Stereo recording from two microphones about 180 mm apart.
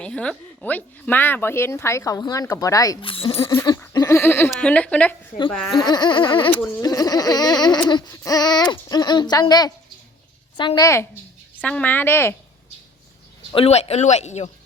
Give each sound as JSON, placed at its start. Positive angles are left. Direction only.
{"t": 0.0, "sound": "speech", "side_deg": 5}
{"t": 3.4, "sound": "speech", "side_deg": 15}
{"t": 5.8, "sound": "speech", "side_deg": 25}
{"t": 6.5, "sound": "speech", "side_deg": 10}
{"t": 11.6, "sound": "speech", "side_deg": 10}
{"t": 13.5, "sound": "speech", "side_deg": 35}